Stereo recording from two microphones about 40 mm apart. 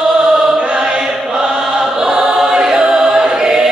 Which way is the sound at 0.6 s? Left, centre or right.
Right.